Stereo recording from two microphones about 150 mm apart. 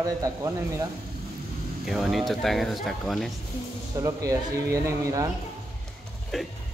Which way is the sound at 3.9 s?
25° right (ahead or behind).